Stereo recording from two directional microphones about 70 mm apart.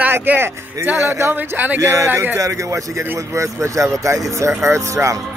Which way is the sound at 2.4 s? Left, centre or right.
Right.